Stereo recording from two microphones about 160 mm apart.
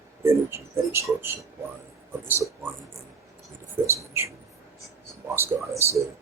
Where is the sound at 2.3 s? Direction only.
15° right (ahead or behind).